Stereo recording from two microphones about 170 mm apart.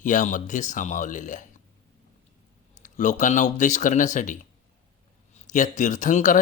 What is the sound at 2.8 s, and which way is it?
Speech, 45° left (ahead or behind).